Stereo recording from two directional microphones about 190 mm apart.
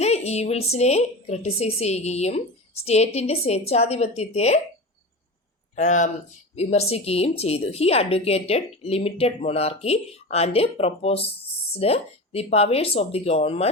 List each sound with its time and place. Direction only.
0.0 s a woman's voice: 35° left (ahead or behind)
5.7 s a woman's voice: 40° left (ahead or behind)